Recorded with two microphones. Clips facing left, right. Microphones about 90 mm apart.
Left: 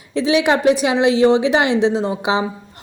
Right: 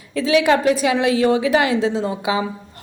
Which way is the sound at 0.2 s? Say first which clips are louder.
Even; 20° left (ahead or behind).